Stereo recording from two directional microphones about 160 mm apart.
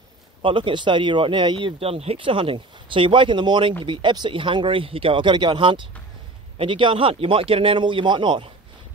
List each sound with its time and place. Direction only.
0.4 s speech: 30° right (ahead or behind)